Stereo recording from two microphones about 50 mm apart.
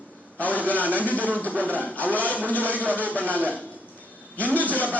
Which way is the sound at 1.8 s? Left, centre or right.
Left.